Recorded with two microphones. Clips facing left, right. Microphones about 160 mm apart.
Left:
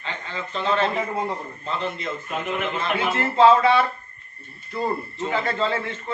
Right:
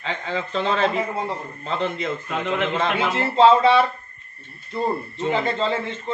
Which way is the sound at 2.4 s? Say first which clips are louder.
Right 5 dB; 90° right.